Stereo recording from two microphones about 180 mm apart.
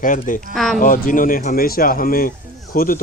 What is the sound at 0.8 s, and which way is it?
Speech, 50° left (ahead or behind).